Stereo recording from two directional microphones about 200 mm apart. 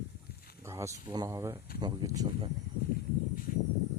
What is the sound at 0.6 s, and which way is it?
Speech, 15° right (ahead or behind).